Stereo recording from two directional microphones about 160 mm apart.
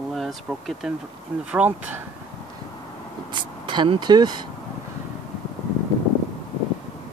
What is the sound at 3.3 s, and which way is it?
Speech, 30° right (ahead or behind).